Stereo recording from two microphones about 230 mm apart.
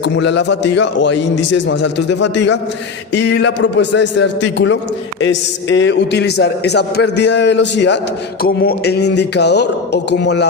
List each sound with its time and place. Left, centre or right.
0.0 s a man's voice: left